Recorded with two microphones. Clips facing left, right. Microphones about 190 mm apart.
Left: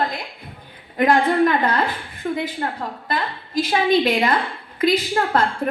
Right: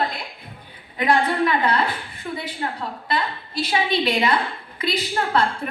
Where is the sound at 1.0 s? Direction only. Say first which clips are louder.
Left 4 dB; 50° left (ahead or behind).